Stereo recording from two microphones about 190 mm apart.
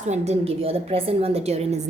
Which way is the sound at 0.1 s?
35° right (ahead or behind).